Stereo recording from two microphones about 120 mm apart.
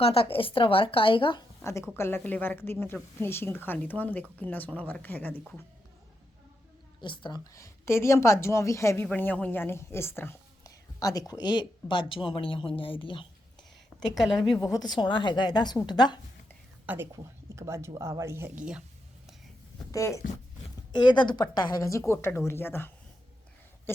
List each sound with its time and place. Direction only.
0.0 s speech: 55° left (ahead or behind)
2.0 s speech: 20° left (ahead or behind)
7.0 s speech: 40° left (ahead or behind)
7.5 s a woman's voice: 25° left (ahead or behind)
9.1 s speech: 15° left (ahead or behind); by 13.2 s 45° left (ahead or behind)
14.5 s speech: 35° left (ahead or behind)
16.8 s a woman's voice: 15° right (ahead or behind)
17.1 s speech: 25° right (ahead or behind)
19.9 s a woman's voice: 25° left (ahead or behind)
20.9 s a woman's voice: 40° left (ahead or behind); by 22.9 s 20° left (ahead or behind)